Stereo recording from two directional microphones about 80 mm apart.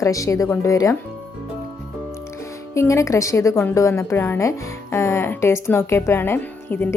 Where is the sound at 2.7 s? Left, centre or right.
Left.